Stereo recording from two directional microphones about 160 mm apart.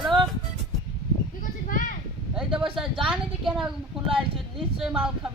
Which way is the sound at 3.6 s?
35° right (ahead or behind).